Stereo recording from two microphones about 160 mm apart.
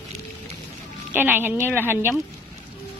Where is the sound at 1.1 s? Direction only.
10° right (ahead or behind).